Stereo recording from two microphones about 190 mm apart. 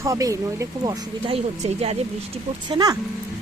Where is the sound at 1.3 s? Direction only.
35° right (ahead or behind).